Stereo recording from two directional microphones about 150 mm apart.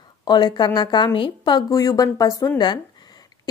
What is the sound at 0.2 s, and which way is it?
Speech, 30° left (ahead or behind).